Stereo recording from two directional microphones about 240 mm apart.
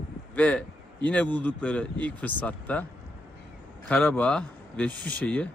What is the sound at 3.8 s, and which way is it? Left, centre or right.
Speech, centre.